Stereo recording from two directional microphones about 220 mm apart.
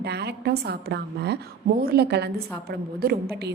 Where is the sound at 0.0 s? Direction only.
50° right (ahead or behind).